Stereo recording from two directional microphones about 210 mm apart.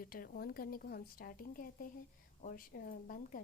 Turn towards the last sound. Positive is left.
turn(degrees=40)  # may be behind; listen again after turning